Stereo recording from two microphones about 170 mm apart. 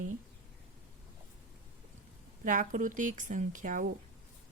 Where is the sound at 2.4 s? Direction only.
50° right (ahead or behind).